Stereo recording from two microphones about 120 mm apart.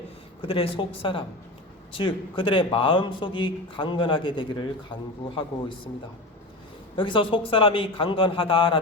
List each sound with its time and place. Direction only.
0.4 s a man's voice: 50° left (ahead or behind)
6.9 s a man's voice: 45° left (ahead or behind)